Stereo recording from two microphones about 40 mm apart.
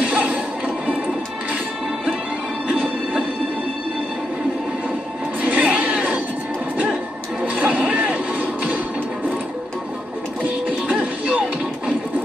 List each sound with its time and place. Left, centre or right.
0.0 s music: right
2.8 s music: right
5.4 s a sound: right
7.4 s vehicle: right
11.0 s music: right